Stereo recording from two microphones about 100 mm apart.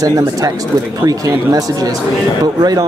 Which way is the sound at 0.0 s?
35° right (ahead or behind).